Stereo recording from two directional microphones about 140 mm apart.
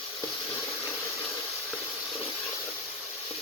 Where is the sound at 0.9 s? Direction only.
10° left (ahead or behind).